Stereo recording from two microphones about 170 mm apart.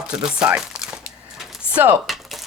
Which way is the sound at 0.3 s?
5° right (ahead or behind).